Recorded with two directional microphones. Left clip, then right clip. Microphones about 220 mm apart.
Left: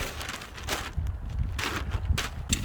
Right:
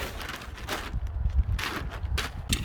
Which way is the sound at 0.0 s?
25° left (ahead or behind).